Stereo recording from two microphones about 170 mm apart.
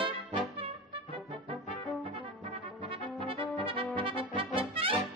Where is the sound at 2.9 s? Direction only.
30° right (ahead or behind).